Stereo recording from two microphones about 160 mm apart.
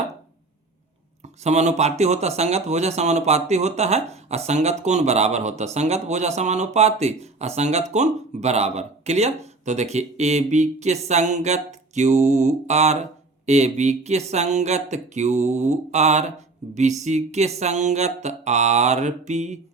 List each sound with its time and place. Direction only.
1.2 s speech: 45° right (ahead or behind)